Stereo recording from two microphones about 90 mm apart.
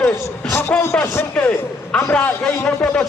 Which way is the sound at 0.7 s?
15° left (ahead or behind).